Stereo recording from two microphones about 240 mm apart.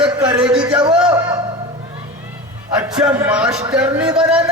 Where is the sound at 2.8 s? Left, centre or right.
Centre.